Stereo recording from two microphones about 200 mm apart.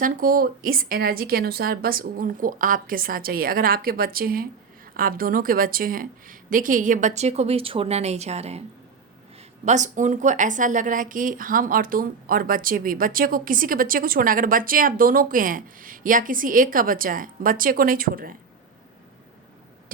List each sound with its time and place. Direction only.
0.0 s a woman's voice: 45° right (ahead or behind)
9.6 s speech: 35° right (ahead or behind)